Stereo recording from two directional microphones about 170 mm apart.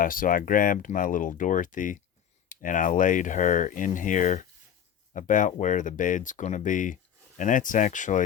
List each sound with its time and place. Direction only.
0.0 s speech: 55° left (ahead or behind)